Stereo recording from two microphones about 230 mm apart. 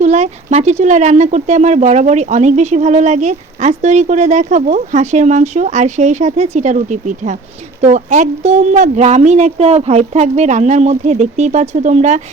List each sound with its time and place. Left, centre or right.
0.0 s speech: right